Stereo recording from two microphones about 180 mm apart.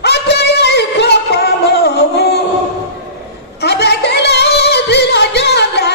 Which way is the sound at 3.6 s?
65° left (ahead or behind).